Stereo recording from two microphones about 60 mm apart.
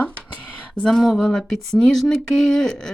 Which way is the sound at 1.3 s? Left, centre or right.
Centre.